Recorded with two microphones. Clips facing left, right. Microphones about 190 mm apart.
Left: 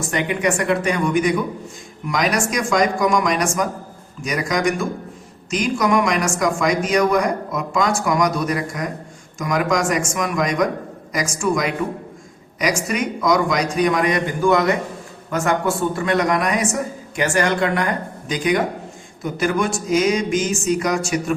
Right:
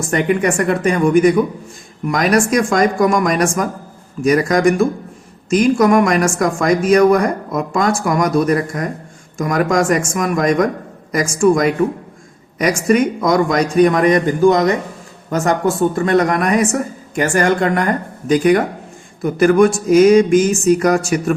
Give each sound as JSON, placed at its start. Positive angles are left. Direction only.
{"t": 0.1, "sound": "speech", "side_deg": -50}